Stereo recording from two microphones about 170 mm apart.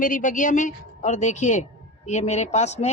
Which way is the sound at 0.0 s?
50° left (ahead or behind).